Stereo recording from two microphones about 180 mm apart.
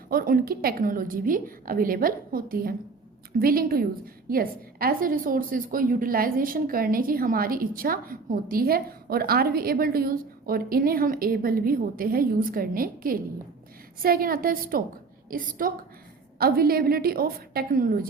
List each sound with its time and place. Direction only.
0.1 s a woman's voice: 55° right (ahead or behind)